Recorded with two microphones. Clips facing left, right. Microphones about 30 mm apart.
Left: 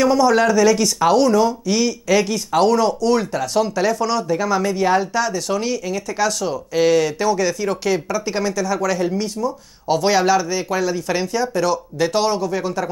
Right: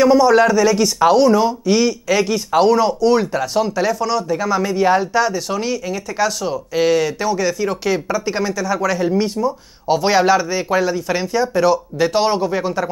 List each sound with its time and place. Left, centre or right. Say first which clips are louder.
0.0 s speech: right 3 dB; centre
12.3 s speech: right 2 dB; right